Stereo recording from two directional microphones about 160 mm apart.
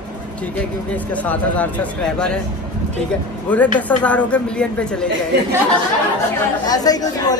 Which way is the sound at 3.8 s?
10° left (ahead or behind).